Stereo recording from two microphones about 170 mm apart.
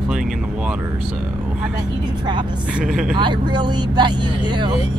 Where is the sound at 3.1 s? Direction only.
25° right (ahead or behind).